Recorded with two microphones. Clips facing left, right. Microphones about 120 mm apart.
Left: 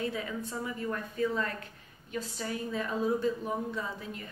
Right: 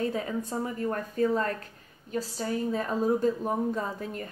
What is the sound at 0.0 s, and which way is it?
A woman's voice, 40° right (ahead or behind).